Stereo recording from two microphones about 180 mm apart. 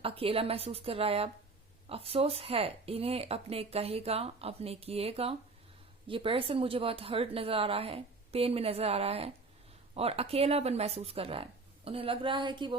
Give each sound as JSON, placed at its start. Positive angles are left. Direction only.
{"t": 0.0, "sound": "a woman's voice", "side_deg": -30}